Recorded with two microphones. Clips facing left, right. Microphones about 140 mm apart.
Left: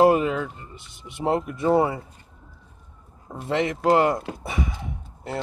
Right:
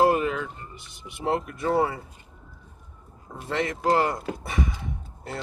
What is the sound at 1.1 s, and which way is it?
Speech, 20° left (ahead or behind).